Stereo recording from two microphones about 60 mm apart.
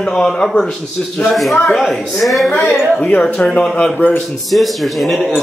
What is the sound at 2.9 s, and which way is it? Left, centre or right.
Speech, centre.